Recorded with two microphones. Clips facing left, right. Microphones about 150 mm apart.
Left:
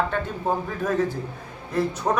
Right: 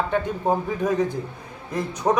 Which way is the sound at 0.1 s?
15° right (ahead or behind).